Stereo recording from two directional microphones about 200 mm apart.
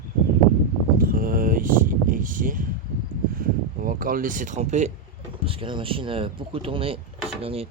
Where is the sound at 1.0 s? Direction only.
45° right (ahead or behind).